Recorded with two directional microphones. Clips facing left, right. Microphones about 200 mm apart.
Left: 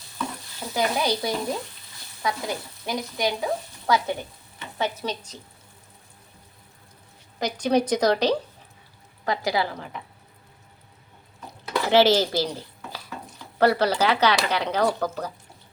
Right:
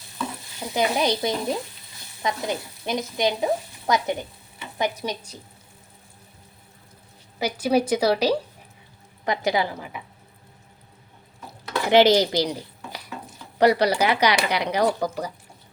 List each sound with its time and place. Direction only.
0.6 s stir: 20° right (ahead or behind)
2.2 s sizzle: 20° right (ahead or behind)
4.8 s speech: 10° right (ahead or behind)
7.3 s speech: 5° right (ahead or behind)
9.2 s speech: 20° right (ahead or behind)
11.9 s speech: 15° right (ahead or behind)